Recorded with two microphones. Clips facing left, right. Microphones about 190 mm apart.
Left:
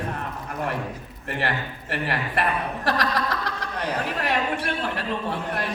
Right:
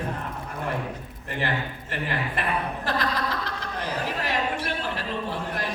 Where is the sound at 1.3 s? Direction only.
70° left (ahead or behind).